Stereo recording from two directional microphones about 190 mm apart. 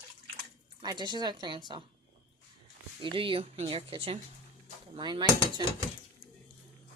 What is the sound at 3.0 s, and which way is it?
Speech, 25° right (ahead or behind).